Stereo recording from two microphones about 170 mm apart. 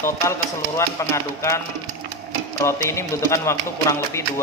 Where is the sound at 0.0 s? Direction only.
15° left (ahead or behind).